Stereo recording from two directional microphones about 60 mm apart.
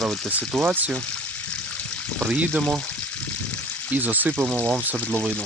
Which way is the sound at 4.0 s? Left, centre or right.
Right.